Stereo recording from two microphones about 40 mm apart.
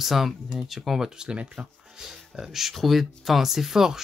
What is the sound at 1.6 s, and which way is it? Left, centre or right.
Speech, centre.